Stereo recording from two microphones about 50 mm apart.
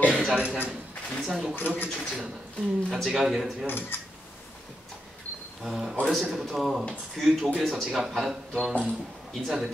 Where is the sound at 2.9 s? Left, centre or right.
Centre.